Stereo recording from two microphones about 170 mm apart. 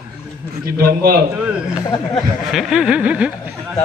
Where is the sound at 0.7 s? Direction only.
60° right (ahead or behind).